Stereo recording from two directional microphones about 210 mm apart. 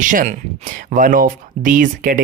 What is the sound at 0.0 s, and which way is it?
Speech, 40° right (ahead or behind).